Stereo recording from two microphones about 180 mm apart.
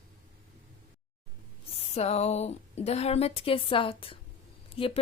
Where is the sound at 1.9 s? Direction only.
35° left (ahead or behind).